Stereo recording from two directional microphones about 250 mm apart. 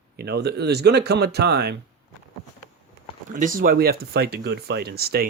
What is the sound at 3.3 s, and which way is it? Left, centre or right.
Speech, right.